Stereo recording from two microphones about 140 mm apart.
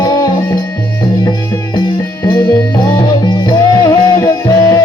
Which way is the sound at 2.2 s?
30° left (ahead or behind).